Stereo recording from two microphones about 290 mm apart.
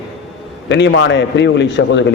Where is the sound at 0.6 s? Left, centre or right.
Left.